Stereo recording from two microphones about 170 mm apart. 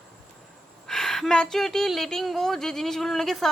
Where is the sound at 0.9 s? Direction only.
Centre (ahead or behind).